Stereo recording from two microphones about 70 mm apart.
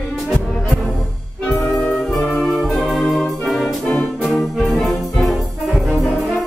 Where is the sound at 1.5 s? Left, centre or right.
Centre.